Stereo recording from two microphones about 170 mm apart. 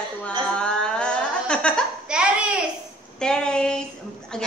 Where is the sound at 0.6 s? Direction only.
5° left (ahead or behind).